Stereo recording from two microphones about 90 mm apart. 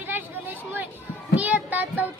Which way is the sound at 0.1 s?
20° right (ahead or behind).